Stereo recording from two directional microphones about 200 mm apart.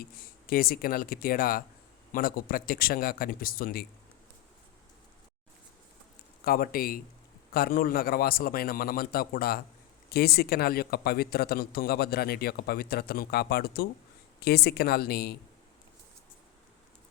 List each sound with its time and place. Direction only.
0.0 s speech: 45° left (ahead or behind)
6.4 s speech: 45° left (ahead or behind)